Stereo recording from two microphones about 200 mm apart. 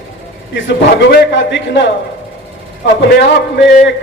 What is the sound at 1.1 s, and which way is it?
Speech, 65° left (ahead or behind).